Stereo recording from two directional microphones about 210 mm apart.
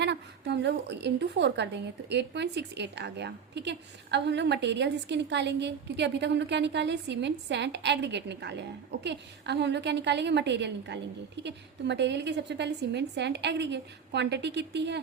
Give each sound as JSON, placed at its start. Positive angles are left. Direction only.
{"t": 0.0, "sound": "a woman's voice", "side_deg": -55}